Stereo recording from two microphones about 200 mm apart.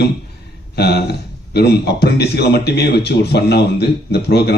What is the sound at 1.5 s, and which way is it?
Speech, 55° left (ahead or behind).